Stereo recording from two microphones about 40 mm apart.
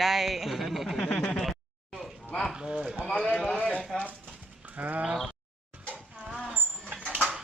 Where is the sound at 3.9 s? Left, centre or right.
Centre.